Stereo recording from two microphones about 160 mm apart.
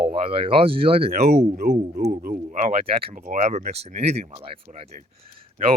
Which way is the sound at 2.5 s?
50° right (ahead or behind).